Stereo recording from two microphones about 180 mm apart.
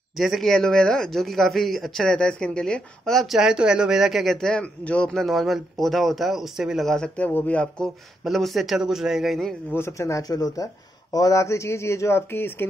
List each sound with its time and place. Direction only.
0.2 s speech: centre (ahead or behind)
9.8 s speech: 15° left (ahead or behind)